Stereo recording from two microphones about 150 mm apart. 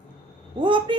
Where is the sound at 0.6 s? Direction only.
30° right (ahead or behind).